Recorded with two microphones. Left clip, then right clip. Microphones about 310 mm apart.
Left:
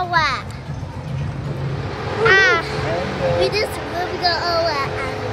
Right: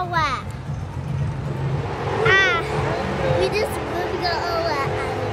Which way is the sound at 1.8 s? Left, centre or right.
Right.